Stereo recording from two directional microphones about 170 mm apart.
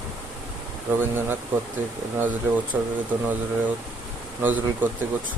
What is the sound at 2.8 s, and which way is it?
Speech, 5° right (ahead or behind).